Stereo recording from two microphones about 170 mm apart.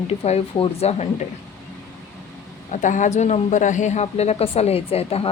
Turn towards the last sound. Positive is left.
turn(degrees=35)  # may be behind; listen again after turning